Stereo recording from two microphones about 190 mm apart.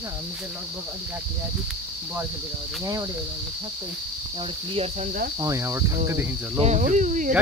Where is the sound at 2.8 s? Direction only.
20° right (ahead or behind).